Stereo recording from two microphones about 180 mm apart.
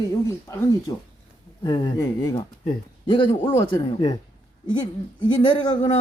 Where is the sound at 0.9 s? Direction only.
20° left (ahead or behind).